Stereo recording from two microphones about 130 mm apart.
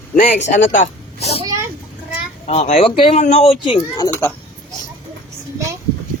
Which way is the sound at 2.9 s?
40° left (ahead or behind).